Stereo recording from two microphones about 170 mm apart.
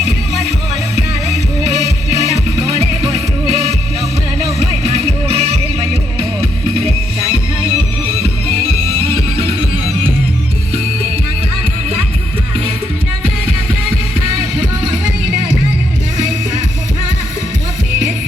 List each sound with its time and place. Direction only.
2.1 s music: 40° right (ahead or behind)
4.4 s music: 40° right (ahead or behind)